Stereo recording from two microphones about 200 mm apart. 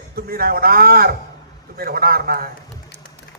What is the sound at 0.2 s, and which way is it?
A man's voice, 50° right (ahead or behind).